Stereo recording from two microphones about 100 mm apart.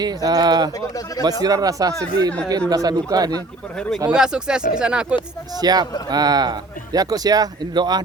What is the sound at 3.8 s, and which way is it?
Speech, 5° left (ahead or behind).